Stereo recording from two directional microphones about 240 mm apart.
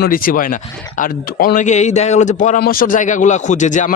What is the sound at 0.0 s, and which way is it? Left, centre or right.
A man's voice, left.